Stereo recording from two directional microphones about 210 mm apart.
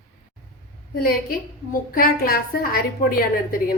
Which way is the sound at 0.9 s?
45° left (ahead or behind).